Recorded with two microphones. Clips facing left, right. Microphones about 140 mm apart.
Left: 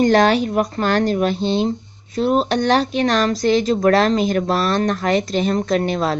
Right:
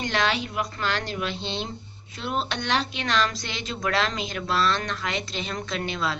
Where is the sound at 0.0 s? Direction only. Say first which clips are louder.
Left 12 dB; 45° left (ahead or behind).